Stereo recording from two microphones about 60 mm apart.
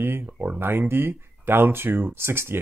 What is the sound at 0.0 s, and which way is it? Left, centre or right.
Speech, right.